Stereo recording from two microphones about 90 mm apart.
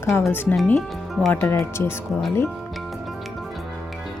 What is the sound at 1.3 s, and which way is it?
Speech, 30° left (ahead or behind).